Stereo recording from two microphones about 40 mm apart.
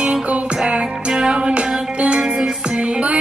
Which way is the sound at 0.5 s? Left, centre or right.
Centre.